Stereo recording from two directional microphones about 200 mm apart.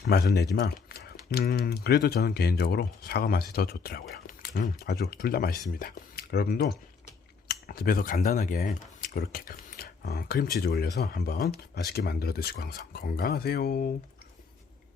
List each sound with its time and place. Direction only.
0.1 s speech: 50° left (ahead or behind)